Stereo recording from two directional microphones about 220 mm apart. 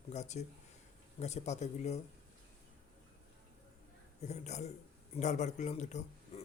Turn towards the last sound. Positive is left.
turn(degrees=30)  # may be behind; listen again after turning